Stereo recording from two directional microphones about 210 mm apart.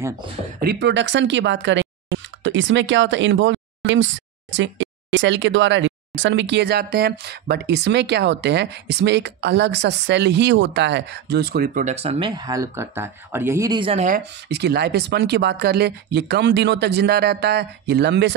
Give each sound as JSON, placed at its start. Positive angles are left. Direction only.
{"t": 0.6, "sound": "speech", "side_deg": -50}
{"t": 14.0, "sound": "speech", "side_deg": -45}